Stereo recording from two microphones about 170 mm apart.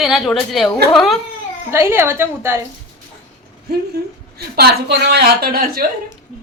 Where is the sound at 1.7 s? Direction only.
15° right (ahead or behind).